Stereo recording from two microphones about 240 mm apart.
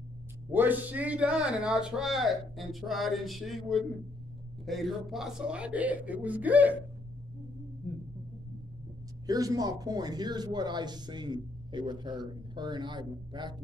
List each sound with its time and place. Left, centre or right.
0.5 s a man's voice: centre
9.2 s speech: centre